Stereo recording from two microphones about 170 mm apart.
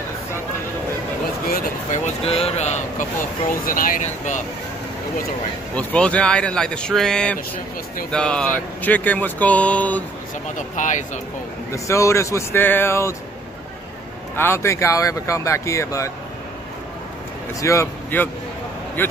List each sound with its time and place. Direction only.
1.9 s speech: 35° left (ahead or behind)
3.6 s speech: 55° left (ahead or behind)
5.8 s a man's voice: 5° left (ahead or behind)
10.8 s speech: 45° left (ahead or behind)
11.7 s speech: 15° left (ahead or behind)
14.3 s speech: 15° left (ahead or behind)
17.6 s speech: 15° left (ahead or behind)